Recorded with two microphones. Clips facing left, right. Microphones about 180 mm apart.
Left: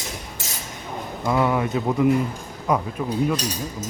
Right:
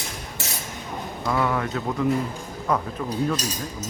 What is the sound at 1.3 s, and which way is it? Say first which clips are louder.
A man's voice: left 3 dB; 15° left (ahead or behind).